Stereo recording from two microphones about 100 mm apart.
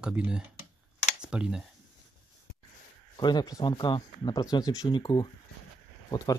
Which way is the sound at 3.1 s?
45° left (ahead or behind).